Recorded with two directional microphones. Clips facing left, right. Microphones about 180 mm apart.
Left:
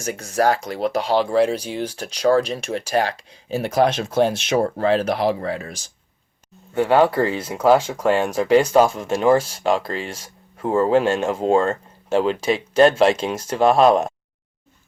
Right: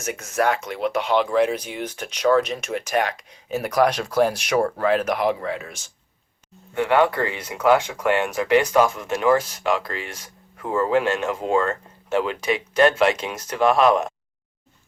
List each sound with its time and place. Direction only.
0.0 s speech: 35° left (ahead or behind)